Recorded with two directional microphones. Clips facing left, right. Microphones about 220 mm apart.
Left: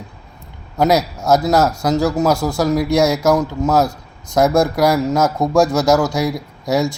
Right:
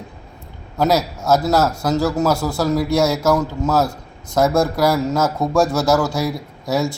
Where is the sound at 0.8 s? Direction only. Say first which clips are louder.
Left 2 dB; 15° left (ahead or behind).